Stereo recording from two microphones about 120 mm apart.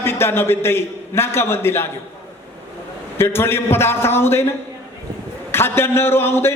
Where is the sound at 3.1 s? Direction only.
20° left (ahead or behind).